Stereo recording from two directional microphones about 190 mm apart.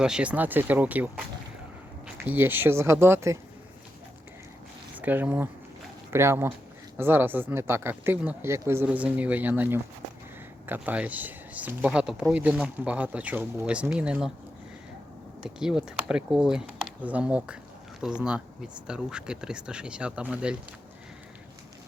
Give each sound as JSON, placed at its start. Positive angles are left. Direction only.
{"t": 0.0, "sound": "speech", "side_deg": -5}
{"t": 4.9, "sound": "speech", "side_deg": -10}
{"t": 15.4, "sound": "speech", "side_deg": -5}